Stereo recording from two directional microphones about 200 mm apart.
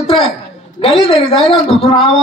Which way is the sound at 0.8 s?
30° left (ahead or behind).